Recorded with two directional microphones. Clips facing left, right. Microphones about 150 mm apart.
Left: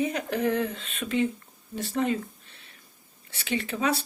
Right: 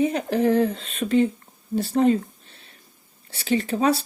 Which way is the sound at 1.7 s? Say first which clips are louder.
Right 8 dB; 35° right (ahead or behind).